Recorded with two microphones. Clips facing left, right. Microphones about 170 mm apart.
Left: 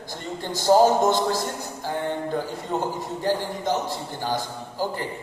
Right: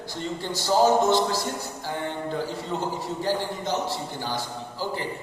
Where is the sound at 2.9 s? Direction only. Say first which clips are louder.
Left 1 dB; 50° left (ahead or behind).